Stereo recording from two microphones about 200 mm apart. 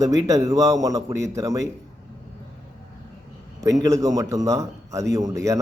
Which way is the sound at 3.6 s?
15° right (ahead or behind).